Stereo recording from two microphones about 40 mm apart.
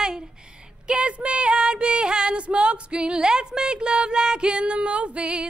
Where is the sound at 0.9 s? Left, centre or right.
Right.